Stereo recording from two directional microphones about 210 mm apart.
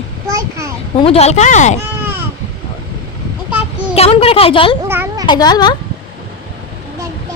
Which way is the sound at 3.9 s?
30° left (ahead or behind).